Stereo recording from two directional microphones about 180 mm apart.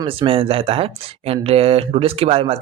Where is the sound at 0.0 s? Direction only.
30° right (ahead or behind).